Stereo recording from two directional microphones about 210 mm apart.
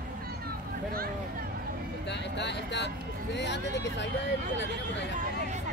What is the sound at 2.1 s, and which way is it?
Vehicle, 55° left (ahead or behind).